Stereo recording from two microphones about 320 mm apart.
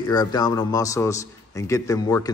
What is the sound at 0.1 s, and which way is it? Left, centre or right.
Speech, centre.